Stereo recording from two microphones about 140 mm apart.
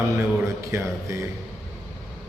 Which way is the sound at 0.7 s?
20° right (ahead or behind).